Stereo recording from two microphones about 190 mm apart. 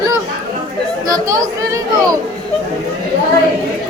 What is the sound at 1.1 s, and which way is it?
Speech, 20° right (ahead or behind).